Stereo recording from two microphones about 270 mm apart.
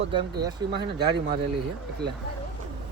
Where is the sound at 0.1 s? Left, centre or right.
Centre.